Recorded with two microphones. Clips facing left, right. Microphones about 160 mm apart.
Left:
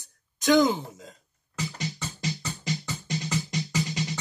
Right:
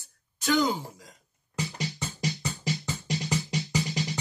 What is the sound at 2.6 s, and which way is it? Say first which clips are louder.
Music: even; 15° right (ahead or behind).